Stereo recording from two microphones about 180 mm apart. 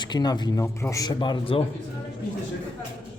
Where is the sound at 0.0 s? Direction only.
25° left (ahead or behind).